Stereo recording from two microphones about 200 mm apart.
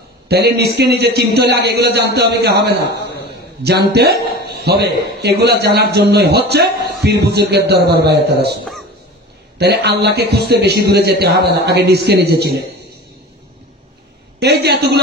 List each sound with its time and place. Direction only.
0.3 s a man's voice: 55° right (ahead or behind)
9.6 s a man's voice: 55° right (ahead or behind)
14.4 s a man's voice: 55° right (ahead or behind)